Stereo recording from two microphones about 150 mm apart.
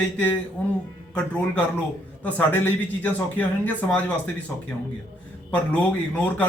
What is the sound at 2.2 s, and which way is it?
Speech, 10° left (ahead or behind).